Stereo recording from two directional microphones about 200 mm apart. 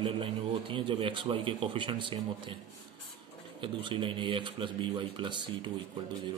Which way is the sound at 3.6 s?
25° right (ahead or behind).